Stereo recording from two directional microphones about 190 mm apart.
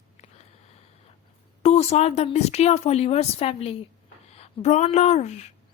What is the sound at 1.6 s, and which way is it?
A woman's voice, 35° left (ahead or behind).